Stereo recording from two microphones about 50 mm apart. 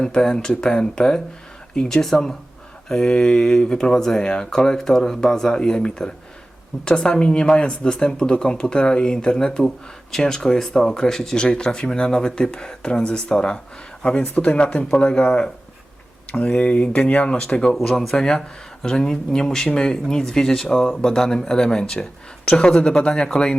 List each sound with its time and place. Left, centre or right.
0.0 s speech: centre
2.9 s speech: centre